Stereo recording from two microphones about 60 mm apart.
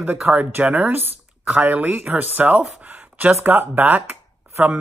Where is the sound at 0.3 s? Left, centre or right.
Right.